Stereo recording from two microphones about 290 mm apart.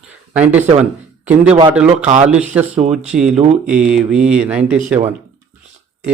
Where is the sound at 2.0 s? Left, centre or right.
Right.